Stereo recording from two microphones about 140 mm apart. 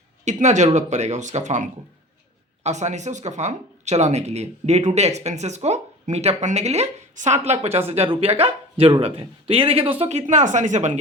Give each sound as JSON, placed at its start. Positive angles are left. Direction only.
{"t": 0.3, "sound": "speech", "side_deg": -55}